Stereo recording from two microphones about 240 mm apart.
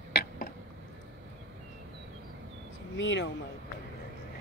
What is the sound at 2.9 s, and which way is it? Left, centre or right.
Speech, left.